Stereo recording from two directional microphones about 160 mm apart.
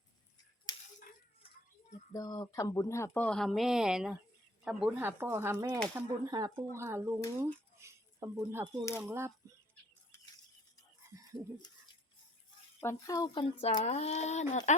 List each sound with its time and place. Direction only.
2.1 s speech: 25° left (ahead or behind); by 7.2 s 15° right (ahead or behind)
7.8 s a sound: 20° right (ahead or behind)
8.8 s speech: 15° left (ahead or behind)
9.0 s speech: 15° right (ahead or behind)
11.1 s a sound: 20° right (ahead or behind)
12.8 s speech: 20° left (ahead or behind)
13.8 s speech: 45° left (ahead or behind)